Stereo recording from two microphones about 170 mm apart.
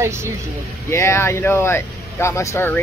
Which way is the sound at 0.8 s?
15° left (ahead or behind).